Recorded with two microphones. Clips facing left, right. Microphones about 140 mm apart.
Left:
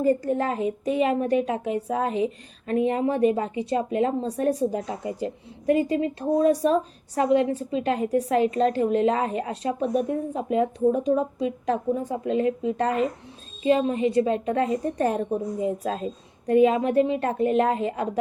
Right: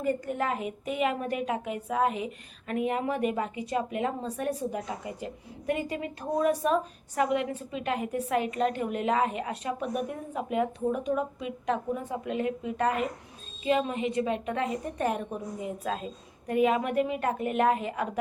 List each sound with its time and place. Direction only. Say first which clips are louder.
0.0 s a woman's voice: left 7 dB; 35° left (ahead or behind)